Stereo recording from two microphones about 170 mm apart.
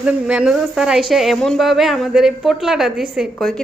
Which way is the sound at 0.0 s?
5° right (ahead or behind).